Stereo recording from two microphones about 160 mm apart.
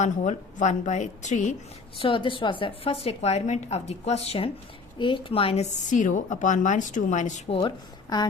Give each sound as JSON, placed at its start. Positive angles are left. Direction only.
{"t": 0.0, "sound": "a woman's voice", "side_deg": 50}
{"t": 2.0, "sound": "a woman's voice", "side_deg": 30}